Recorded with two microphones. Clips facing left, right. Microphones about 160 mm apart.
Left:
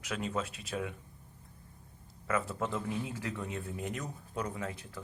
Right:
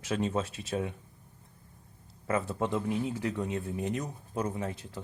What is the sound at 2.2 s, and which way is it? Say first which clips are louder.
Speech: right 3 dB; 25° right (ahead or behind).